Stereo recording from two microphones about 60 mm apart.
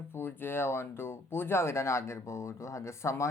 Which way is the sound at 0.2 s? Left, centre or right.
Left.